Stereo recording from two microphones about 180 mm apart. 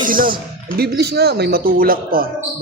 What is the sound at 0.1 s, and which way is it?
Speech, 50° right (ahead or behind).